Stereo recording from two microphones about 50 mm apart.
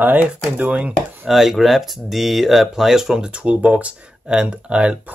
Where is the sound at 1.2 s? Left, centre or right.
Centre.